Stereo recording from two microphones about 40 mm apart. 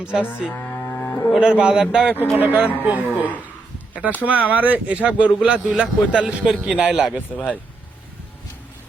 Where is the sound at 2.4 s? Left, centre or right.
Right.